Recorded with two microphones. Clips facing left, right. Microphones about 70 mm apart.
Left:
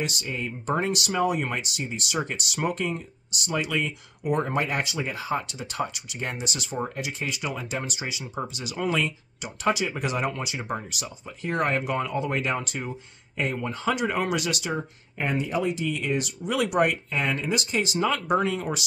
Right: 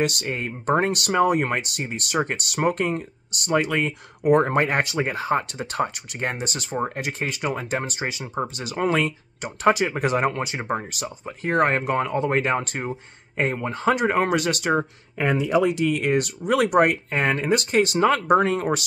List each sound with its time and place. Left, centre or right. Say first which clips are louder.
0.0 s speech: right 6 dB; right
15.1 s speech: right 6 dB; right